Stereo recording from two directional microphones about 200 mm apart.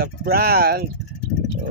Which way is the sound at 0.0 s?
50° right (ahead or behind).